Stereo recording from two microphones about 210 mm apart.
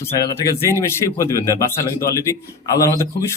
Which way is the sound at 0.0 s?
15° left (ahead or behind).